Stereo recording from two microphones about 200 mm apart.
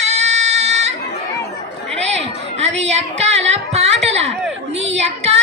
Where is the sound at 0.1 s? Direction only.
35° right (ahead or behind).